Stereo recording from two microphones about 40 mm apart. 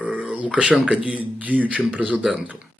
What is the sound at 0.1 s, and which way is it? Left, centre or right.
Speech, right.